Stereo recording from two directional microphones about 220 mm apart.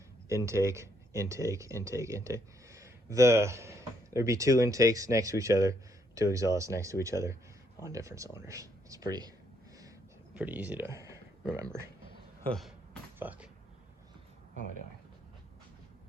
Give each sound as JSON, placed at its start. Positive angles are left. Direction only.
{"t": 0.3, "sound": "speech", "side_deg": -15}
{"t": 10.3, "sound": "speech", "side_deg": -5}
{"t": 12.5, "sound": "a sound", "side_deg": 0}
{"t": 13.1, "sound": "speech", "side_deg": -5}